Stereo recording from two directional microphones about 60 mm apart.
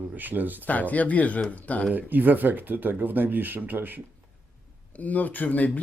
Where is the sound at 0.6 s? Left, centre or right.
Left.